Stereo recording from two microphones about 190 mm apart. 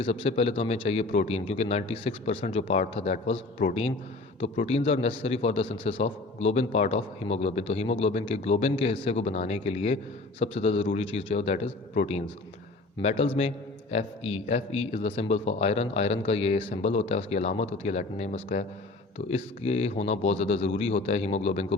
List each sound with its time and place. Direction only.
0.0 s a man's voice: 35° left (ahead or behind)